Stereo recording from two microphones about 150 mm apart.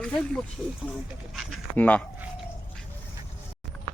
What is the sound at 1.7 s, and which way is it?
Speech, 10° left (ahead or behind).